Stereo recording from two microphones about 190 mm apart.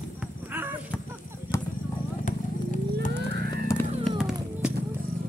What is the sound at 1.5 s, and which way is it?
Vehicle, 15° left (ahead or behind).